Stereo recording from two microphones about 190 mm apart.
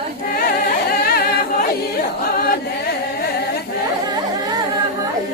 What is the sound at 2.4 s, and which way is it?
Carnatic music, 55° left (ahead or behind).